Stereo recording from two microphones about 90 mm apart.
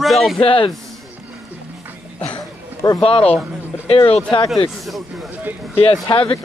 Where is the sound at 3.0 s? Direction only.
90° left.